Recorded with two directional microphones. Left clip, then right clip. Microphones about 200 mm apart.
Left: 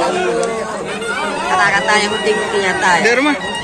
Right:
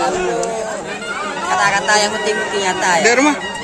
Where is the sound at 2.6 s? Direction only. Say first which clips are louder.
Left 2 dB; 45° right (ahead or behind).